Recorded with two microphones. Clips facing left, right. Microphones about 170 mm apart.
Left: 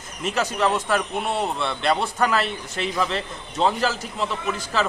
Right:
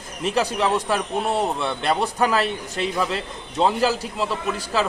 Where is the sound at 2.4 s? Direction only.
35° right (ahead or behind).